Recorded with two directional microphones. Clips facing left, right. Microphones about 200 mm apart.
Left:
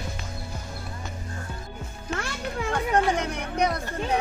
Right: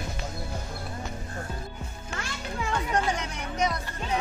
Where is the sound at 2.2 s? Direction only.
60° left (ahead or behind).